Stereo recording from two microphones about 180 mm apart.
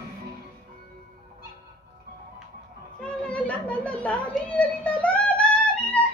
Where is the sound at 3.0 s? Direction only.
5° left (ahead or behind).